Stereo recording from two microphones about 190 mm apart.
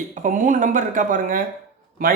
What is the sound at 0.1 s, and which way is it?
Speech, 45° right (ahead or behind).